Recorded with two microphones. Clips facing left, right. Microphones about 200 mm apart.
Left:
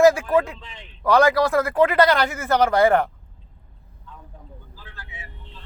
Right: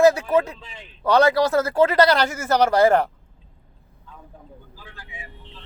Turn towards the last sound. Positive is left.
turn(degrees=-15)  # may be behind; listen again after turning